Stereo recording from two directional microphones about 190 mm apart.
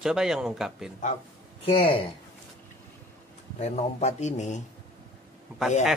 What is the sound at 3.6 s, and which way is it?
A man's voice, 35° left (ahead or behind).